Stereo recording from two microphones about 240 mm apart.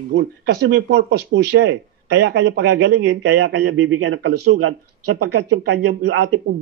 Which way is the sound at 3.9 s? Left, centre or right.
Right.